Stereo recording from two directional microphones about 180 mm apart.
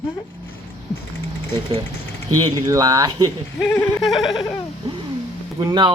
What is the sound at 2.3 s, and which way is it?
Speech, 20° right (ahead or behind).